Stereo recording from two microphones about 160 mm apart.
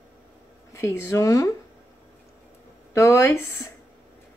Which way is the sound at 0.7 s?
15° left (ahead or behind).